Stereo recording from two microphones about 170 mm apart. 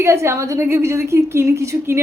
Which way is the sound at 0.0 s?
15° right (ahead or behind).